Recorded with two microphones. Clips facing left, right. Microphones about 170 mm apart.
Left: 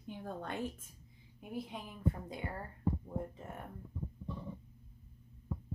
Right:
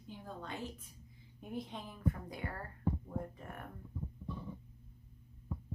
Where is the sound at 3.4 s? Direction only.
25° left (ahead or behind).